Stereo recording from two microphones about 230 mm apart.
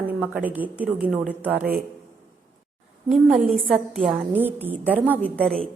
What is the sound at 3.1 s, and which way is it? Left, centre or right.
A woman's voice, centre.